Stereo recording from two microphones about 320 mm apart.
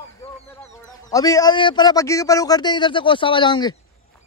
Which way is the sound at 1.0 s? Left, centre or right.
Centre.